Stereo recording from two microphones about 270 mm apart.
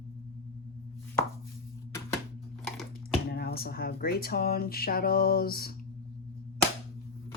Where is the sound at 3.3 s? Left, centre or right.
Left.